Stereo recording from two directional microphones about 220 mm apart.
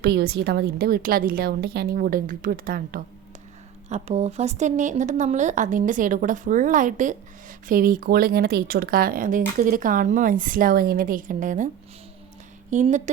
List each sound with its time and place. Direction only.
0.0 s a woman's voice: 50° right (ahead or behind)
3.8 s a woman's voice: 30° right (ahead or behind)
12.7 s a woman's voice: 35° right (ahead or behind)